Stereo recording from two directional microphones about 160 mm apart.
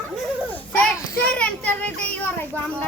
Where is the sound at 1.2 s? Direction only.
5° left (ahead or behind).